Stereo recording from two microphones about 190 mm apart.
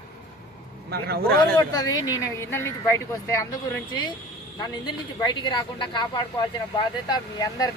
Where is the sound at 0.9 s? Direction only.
55° right (ahead or behind).